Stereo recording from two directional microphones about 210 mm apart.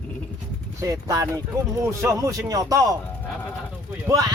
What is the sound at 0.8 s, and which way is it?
Speech, 15° right (ahead or behind).